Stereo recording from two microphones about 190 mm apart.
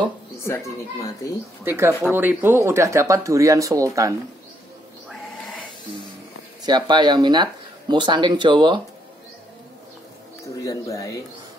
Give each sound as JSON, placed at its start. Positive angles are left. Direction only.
{"t": 0.5, "sound": "a woman's voice", "side_deg": 15}
{"t": 1.6, "sound": "speech", "side_deg": -15}
{"t": 6.6, "sound": "speech", "side_deg": -25}
{"t": 10.4, "sound": "a woman's voice", "side_deg": 15}